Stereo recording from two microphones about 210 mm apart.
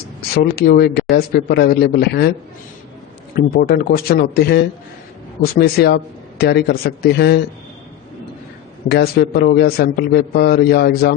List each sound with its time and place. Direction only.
0.2 s a man's voice: 45° left (ahead or behind)
3.3 s a man's voice: 45° left (ahead or behind)
8.9 s a man's voice: 50° left (ahead or behind)